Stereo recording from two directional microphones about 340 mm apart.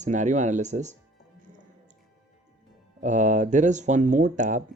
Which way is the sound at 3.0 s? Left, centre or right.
Right.